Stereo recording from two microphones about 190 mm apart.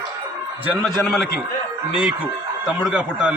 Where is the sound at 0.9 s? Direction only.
Centre (ahead or behind).